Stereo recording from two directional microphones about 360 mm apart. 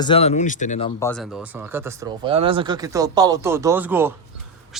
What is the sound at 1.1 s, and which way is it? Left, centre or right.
Speech, centre.